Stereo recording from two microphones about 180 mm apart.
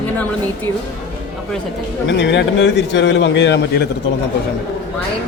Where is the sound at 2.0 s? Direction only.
80° left.